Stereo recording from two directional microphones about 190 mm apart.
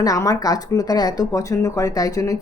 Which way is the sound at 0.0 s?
20° left (ahead or behind).